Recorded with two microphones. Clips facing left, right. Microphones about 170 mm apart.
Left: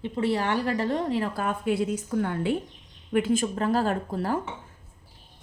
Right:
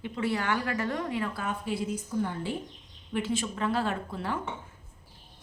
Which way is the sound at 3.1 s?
50° left (ahead or behind).